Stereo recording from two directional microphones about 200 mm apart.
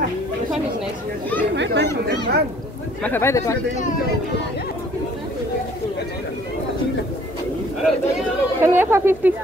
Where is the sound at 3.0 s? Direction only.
10° left (ahead or behind).